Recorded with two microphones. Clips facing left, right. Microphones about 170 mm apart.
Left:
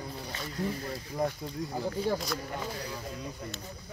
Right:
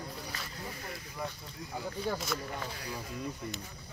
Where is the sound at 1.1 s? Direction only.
35° left (ahead or behind).